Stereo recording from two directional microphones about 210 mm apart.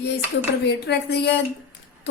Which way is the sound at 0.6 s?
55° left (ahead or behind).